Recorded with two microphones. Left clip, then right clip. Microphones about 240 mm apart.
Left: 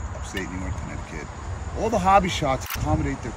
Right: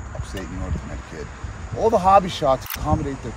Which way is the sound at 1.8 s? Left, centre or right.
Centre.